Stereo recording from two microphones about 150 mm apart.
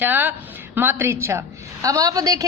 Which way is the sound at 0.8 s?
15° right (ahead or behind).